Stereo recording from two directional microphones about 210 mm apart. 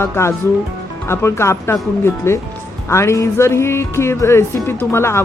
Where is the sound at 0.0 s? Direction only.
10° left (ahead or behind).